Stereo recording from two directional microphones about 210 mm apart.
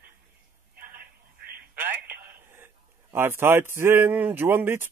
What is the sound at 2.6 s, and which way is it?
Mantra, 10° right (ahead or behind).